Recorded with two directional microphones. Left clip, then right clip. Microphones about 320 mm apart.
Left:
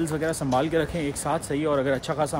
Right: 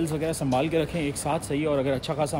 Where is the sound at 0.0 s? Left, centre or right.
Left.